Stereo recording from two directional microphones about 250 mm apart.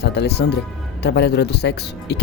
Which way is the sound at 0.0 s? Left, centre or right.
Left.